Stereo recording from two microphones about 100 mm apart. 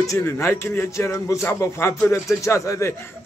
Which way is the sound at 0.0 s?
30° left (ahead or behind).